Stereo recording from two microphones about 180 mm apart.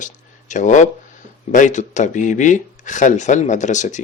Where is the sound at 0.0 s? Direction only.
45° left (ahead or behind).